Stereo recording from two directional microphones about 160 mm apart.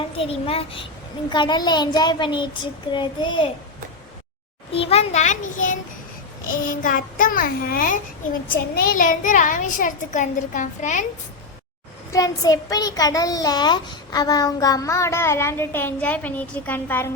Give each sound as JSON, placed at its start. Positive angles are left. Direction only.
{"t": 0.2, "sound": "a child's voice", "side_deg": 35}
{"t": 4.7, "sound": "a child's voice", "side_deg": 35}
{"t": 12.1, "sound": "a child's voice", "side_deg": 25}